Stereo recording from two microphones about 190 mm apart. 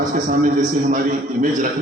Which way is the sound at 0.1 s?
45° right (ahead or behind).